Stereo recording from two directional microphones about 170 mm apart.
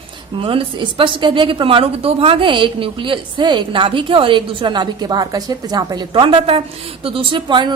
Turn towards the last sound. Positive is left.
turn(degrees=-25)  # may be behind; listen again after turning